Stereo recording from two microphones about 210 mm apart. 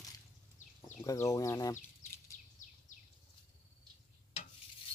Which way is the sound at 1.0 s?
15° left (ahead or behind).